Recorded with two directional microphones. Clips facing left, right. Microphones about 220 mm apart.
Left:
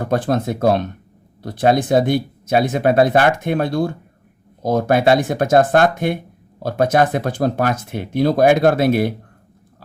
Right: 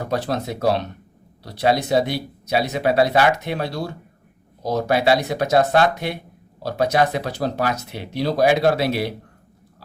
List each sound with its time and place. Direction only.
0.0 s speech: 50° left (ahead or behind)